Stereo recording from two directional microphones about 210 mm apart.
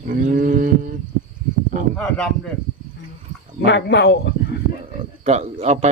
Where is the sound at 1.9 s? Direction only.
5° left (ahead or behind).